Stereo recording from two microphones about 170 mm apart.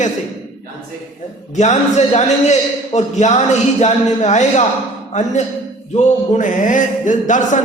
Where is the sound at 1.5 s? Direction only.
40° left (ahead or behind).